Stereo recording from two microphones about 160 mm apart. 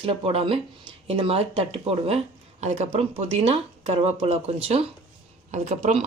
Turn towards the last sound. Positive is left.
turn(degrees=-45)  # may be behind; listen again after turning